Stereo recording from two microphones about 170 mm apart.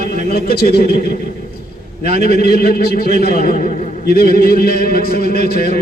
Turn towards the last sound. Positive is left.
turn(degrees=65)  # may be behind; listen again after turning